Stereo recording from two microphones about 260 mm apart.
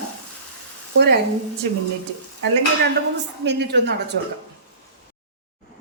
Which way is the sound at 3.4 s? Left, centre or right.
Right.